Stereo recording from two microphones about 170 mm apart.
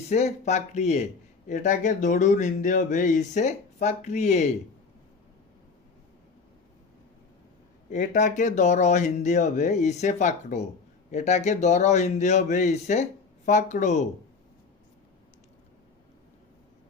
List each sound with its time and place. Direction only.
0.1 s speech: 40° left (ahead or behind)
7.9 s speech: 45° left (ahead or behind)